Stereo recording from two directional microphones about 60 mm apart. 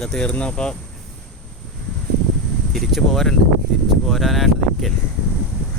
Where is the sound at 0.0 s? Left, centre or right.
Centre.